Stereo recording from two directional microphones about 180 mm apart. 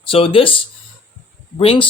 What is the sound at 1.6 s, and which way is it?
Speech, 30° left (ahead or behind).